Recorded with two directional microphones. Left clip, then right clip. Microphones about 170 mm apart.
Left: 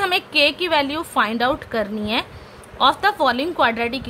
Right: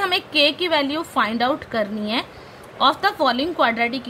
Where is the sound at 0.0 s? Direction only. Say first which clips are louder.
Left 1 dB; 15° left (ahead or behind).